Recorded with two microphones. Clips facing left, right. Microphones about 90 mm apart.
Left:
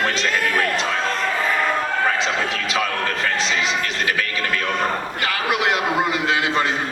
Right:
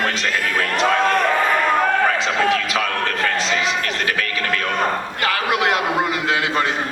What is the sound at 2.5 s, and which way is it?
A man's voice, 25° left (ahead or behind).